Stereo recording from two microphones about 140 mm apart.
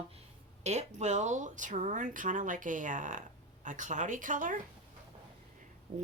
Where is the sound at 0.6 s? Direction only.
55° right (ahead or behind).